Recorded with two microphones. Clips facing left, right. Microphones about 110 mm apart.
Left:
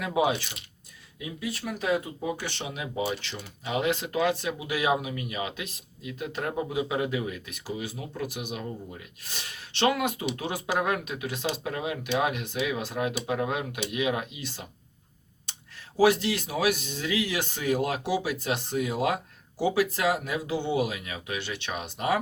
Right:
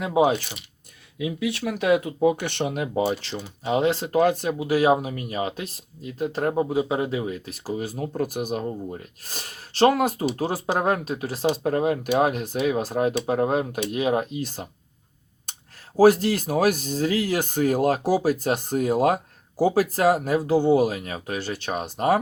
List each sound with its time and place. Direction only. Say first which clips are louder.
0.0 s speech: right 5 dB; 30° right (ahead or behind)
1.2 s speech: right 8 dB; 80° right; by 14.7 s 45° right (ahead or behind)
15.5 s a sound: right 3 dB; 50° right (ahead or behind)
16.0 s speech: right 6 dB; 40° right (ahead or behind)